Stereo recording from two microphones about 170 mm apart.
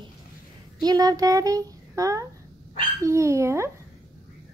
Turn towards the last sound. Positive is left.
turn(degrees=-15)  # may be behind; listen again after turning